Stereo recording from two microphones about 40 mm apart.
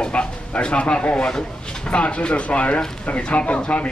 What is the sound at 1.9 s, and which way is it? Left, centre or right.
Speech, left.